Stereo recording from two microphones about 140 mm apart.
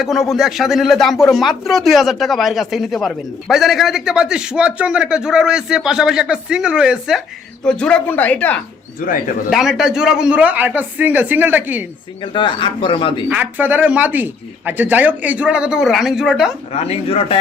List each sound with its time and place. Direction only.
0.0 s speech: centre (ahead or behind)
7.6 s speech: 5° left (ahead or behind)
9.0 s speech: 80° left
9.5 s speech: centre (ahead or behind)
12.2 s speech: 35° left (ahead or behind)
13.2 s speech: 10° right (ahead or behind)
16.7 s speech: 45° left (ahead or behind)